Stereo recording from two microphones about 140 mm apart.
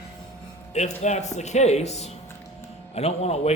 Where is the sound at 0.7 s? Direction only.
55° left (ahead or behind).